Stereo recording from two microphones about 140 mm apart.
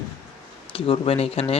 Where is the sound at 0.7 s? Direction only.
40° left (ahead or behind).